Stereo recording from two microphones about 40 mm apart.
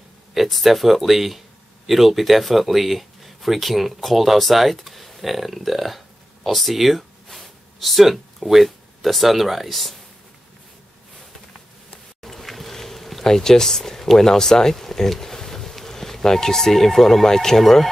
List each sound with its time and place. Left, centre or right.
0.3 s speech: centre
12.2 s a sound: centre
13.2 s speech: centre